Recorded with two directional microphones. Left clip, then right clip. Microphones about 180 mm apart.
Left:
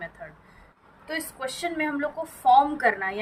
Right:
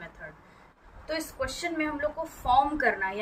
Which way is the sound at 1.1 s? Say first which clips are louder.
Even; 20° left (ahead or behind).